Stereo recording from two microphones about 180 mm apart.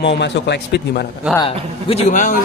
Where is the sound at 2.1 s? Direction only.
45° left (ahead or behind).